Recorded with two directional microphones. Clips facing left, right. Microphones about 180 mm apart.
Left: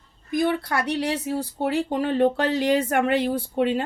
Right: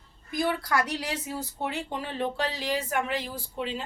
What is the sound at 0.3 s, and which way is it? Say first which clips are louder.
Speech: left 4 dB; 25° left (ahead or behind).